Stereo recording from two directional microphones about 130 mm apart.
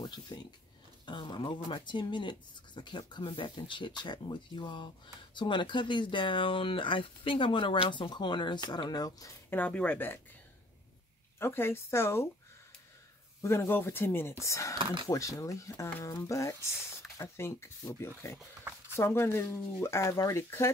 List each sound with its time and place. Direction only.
0.0 s speech: 30° left (ahead or behind)
9.5 s speech: 10° left (ahead or behind)
11.3 s speech: 20° left (ahead or behind)
13.4 s speech: 20° left (ahead or behind)
18.6 s a sound: 15° right (ahead or behind)
18.9 s speech: 20° left (ahead or behind)